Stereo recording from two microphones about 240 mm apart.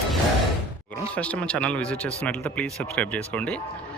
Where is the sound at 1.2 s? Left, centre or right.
Centre.